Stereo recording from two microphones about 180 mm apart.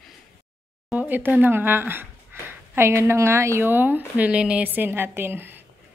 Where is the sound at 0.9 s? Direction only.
10° right (ahead or behind).